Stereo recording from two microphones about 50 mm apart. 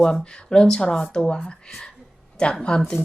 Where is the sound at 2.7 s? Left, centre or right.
Centre.